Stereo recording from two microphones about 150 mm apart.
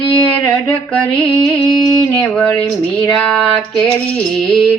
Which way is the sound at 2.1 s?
10° left (ahead or behind).